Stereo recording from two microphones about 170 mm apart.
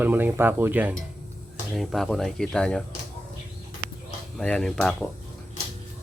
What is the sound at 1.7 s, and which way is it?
Speech, centre (ahead or behind).